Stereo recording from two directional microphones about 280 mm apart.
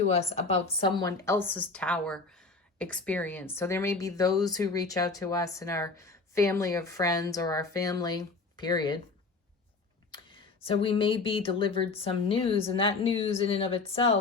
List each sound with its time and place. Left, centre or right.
0.0 s a woman's voice: left
10.6 s a woman's voice: centre